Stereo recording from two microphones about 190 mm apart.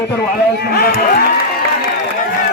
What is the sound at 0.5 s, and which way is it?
Speech, 60° left (ahead or behind).